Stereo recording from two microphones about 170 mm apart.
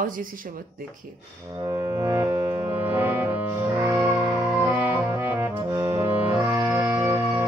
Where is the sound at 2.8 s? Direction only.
10° right (ahead or behind).